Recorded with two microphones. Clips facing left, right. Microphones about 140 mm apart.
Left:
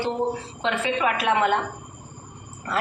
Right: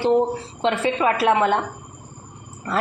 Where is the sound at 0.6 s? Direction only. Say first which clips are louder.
Right 4 dB; 35° right (ahead or behind).